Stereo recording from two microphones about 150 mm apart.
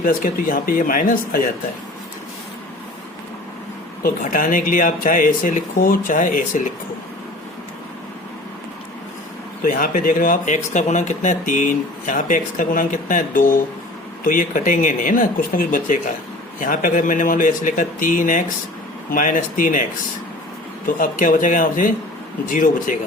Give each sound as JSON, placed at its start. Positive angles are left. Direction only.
{"t": 0.0, "sound": "speech", "side_deg": 70}
{"t": 4.0, "sound": "speech", "side_deg": 65}
{"t": 9.6, "sound": "speech", "side_deg": 65}
{"t": 20.8, "sound": "speech", "side_deg": 65}